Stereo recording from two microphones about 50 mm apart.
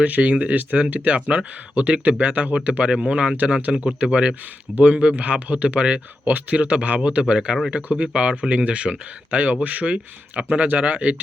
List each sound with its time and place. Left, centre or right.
0.0 s speech: right
6.2 s speech: right